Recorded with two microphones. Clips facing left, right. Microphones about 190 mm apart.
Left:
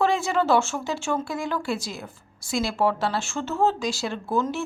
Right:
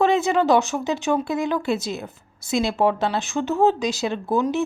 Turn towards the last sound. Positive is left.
turn(degrees=-15)  # may be behind; listen again after turning